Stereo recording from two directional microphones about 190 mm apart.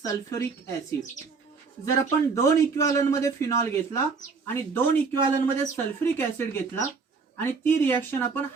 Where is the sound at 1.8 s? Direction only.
15° left (ahead or behind).